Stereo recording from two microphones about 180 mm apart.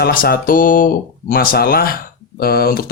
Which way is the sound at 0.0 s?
55° left (ahead or behind).